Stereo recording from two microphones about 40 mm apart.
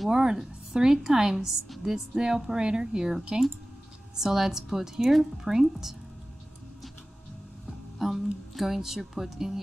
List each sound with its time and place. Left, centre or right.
0.1 s speech: centre
4.2 s speech: centre
8.0 s speech: centre